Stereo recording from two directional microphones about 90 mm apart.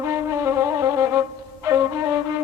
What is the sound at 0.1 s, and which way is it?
Music, 30° right (ahead or behind).